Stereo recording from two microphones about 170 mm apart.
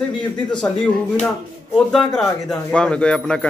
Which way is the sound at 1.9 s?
Centre (ahead or behind).